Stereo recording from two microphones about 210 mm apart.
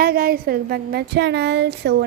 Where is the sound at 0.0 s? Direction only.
45° right (ahead or behind).